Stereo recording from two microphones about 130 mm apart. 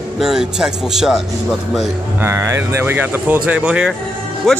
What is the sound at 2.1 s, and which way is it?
Speech, 20° right (ahead or behind).